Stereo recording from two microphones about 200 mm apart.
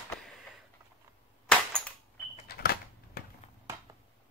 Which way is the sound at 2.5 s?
50° left (ahead or behind).